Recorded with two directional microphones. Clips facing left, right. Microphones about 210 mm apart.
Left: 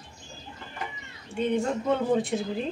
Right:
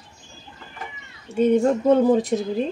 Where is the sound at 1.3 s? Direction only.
40° right (ahead or behind).